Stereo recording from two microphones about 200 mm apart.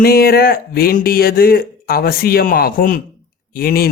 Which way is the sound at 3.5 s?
50° left (ahead or behind).